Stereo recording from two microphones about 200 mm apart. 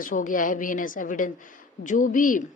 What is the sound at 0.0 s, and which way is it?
Speech, 40° left (ahead or behind).